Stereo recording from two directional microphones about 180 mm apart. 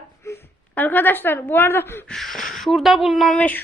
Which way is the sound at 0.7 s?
10° left (ahead or behind).